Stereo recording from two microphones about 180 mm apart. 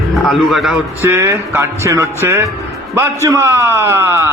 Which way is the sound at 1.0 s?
15° right (ahead or behind).